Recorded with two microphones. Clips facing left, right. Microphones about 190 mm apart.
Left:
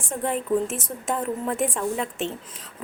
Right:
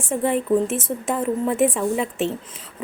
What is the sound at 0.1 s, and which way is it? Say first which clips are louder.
A woman's voice: right 5 dB; 5° right (ahead or behind).